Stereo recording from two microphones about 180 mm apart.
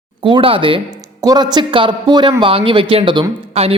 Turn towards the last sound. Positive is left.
turn(degrees=-30)  # may be behind; listen again after turning